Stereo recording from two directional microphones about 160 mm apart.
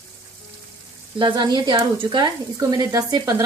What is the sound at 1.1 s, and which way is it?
Speech, 30° right (ahead or behind).